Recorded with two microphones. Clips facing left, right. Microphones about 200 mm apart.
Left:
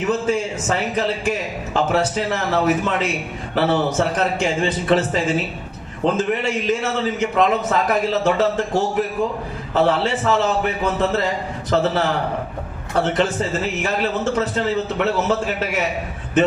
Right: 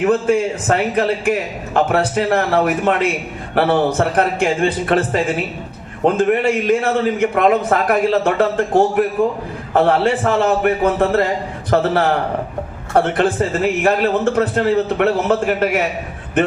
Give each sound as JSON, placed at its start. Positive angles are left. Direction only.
{"t": 0.0, "sound": "a man's voice", "side_deg": -55}